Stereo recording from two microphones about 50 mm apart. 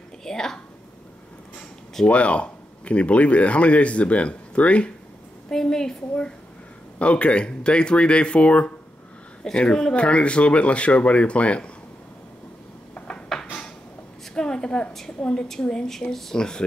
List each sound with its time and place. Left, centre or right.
0.2 s a woman's voice: centre
2.0 s speech: left
5.5 s speech: centre
12.9 s a sound: centre
14.3 s a sound: centre
15.1 s speech: centre